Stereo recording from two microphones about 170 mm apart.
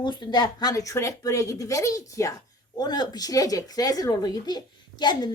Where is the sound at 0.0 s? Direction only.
25° left (ahead or behind).